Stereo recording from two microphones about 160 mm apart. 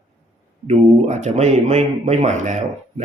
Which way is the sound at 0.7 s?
45° right (ahead or behind).